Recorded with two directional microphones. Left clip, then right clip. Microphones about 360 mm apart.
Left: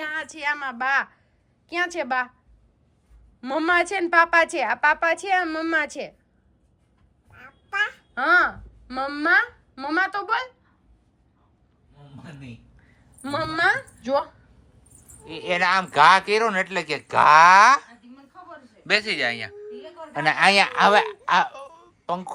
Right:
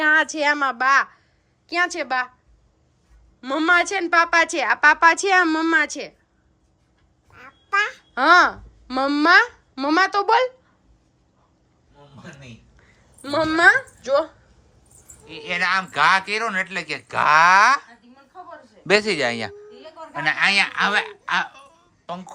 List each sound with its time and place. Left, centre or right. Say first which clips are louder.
0.0 s a woman's voice: right 10 dB; right; by 2.3 s centre
3.4 s a woman's voice: right 3 dB; centre
7.3 s quack: right 4 dB; right
8.1 s a child's voice: right 5 dB; centre
12.8 s a sound: even; centre
15.2 s a woman's voice: left 1 dB; centre
20.1 s speech: left 1 dB; centre